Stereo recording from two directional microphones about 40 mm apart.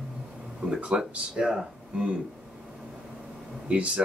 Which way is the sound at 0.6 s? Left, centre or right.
Right.